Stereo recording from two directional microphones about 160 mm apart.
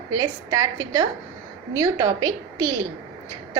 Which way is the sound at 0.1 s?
25° right (ahead or behind).